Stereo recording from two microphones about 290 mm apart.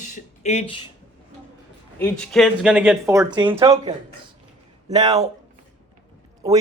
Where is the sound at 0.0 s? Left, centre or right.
Left.